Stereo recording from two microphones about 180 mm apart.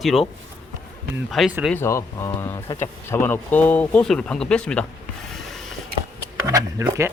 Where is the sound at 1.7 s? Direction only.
15° left (ahead or behind).